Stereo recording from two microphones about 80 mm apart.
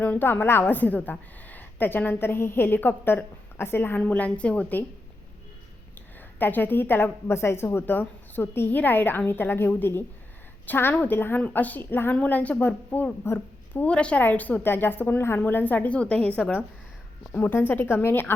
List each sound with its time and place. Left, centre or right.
0.0 s a woman's voice: left
4.0 s a woman's voice: centre
6.1 s a woman's voice: left
13.8 s a woman's voice: centre
17.5 s a woman's voice: left